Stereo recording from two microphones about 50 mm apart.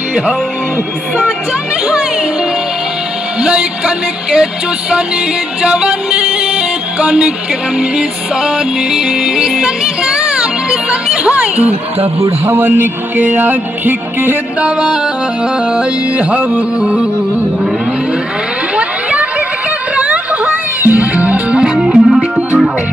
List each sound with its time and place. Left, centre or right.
3.3 s music: right
12.5 s speech: right
13.2 s music: right
14.6 s music: centre
18.8 s a sound: right
20.8 s music: right
21.8 s music: centre